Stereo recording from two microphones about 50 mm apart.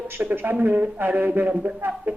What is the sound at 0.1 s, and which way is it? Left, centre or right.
A man's voice, right.